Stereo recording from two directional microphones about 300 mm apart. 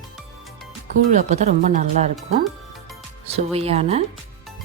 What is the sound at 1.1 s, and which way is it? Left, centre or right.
Speech, right.